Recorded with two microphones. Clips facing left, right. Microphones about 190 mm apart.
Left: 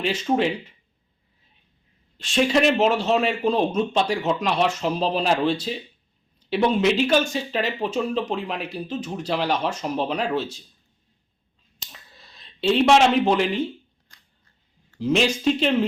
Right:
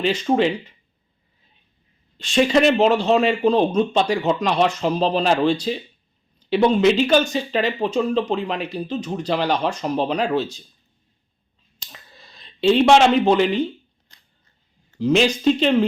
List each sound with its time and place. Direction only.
0.0 s speech: 5° left (ahead or behind)
2.1 s speech: 5° left (ahead or behind)
11.9 s a sound: centre (ahead or behind)
13.3 s speech: 5° left (ahead or behind)
14.1 s camera: 20° right (ahead or behind)
14.9 s speech: centre (ahead or behind)